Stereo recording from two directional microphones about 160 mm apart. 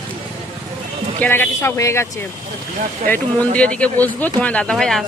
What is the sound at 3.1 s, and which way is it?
Speech, 10° left (ahead or behind).